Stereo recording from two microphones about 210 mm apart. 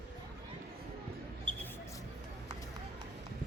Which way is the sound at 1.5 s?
25° right (ahead or behind).